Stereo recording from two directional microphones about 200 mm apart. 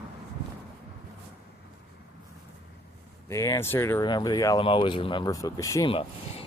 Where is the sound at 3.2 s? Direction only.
15° left (ahead or behind).